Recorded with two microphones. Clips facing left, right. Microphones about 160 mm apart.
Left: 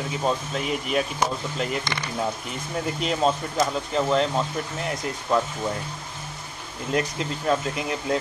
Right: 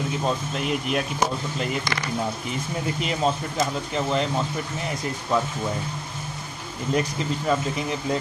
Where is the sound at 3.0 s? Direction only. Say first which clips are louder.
Left 2 dB; centre (ahead or behind).